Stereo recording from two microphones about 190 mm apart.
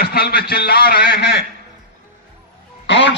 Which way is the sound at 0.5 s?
55° left (ahead or behind).